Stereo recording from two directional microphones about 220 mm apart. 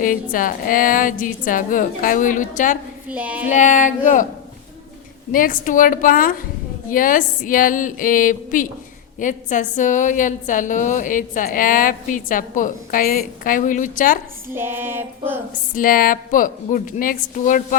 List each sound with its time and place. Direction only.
0.0 s a woman's voice: 40° left (ahead or behind)
3.1 s child singing: 5° right (ahead or behind)
3.5 s a woman's voice: 35° left (ahead or behind)
5.3 s a woman's voice: 40° left (ahead or behind)
14.5 s child singing: 10° right (ahead or behind)
15.7 s a woman's voice: 40° left (ahead or behind)